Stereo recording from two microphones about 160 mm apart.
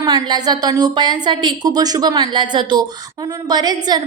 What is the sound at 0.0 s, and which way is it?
A woman's voice, 25° right (ahead or behind).